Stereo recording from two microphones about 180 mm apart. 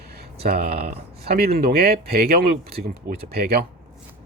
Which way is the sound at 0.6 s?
55° right (ahead or behind).